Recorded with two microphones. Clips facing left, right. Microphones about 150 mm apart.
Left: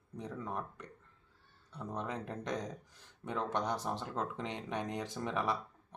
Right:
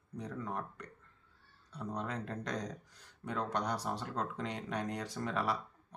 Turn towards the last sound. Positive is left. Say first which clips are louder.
# even
turn(degrees=20)  # may be behind; listen again after turning